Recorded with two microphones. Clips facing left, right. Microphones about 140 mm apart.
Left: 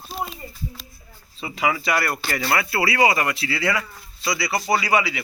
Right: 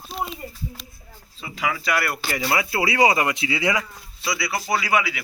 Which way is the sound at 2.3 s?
15° right (ahead or behind).